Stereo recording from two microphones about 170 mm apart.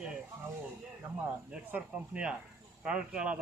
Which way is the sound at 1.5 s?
10° right (ahead or behind).